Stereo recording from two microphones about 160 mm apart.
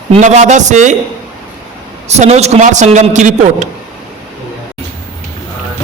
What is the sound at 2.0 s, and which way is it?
A man's voice, 45° right (ahead or behind).